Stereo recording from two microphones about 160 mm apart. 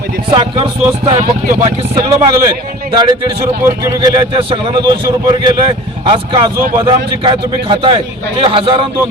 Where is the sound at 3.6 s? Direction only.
25° right (ahead or behind).